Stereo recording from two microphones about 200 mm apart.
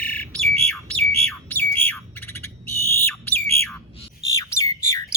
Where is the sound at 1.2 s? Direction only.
10° left (ahead or behind).